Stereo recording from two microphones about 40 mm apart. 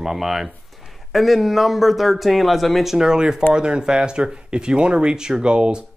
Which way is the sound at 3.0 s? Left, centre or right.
Centre.